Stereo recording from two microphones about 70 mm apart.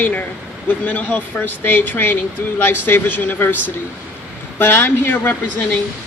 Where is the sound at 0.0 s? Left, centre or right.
Left.